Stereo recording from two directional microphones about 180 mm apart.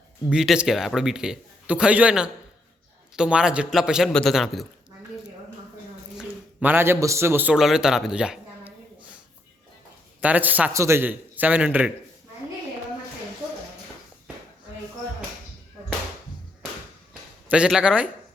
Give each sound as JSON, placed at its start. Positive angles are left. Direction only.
{"t": 0.3, "sound": "a man's voice", "side_deg": -5}
{"t": 6.1, "sound": "a man's voice", "side_deg": -10}
{"t": 10.2, "sound": "a man's voice", "side_deg": -10}
{"t": 17.5, "sound": "a man's voice", "side_deg": -5}